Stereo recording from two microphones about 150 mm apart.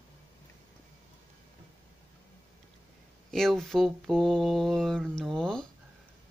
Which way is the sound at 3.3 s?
5° left (ahead or behind).